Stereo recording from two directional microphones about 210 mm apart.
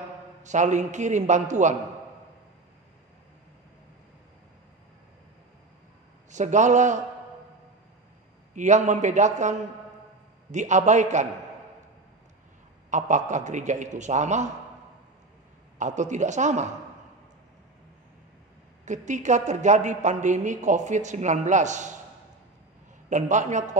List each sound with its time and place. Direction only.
0.4 s a woman's voice: 35° right (ahead or behind)
6.3 s a woman's voice: 35° right (ahead or behind)
8.5 s a woman's voice: 35° right (ahead or behind)
12.9 s a woman's voice: 35° right (ahead or behind)
15.8 s a woman's voice: 35° right (ahead or behind)
18.9 s a woman's voice: 35° right (ahead or behind)
23.0 s a woman's voice: 35° right (ahead or behind)